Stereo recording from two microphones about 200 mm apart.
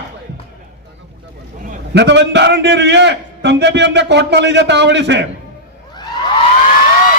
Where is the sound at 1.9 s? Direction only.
60° right (ahead or behind).